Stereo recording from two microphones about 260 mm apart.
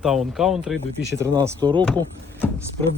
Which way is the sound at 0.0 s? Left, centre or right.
Centre.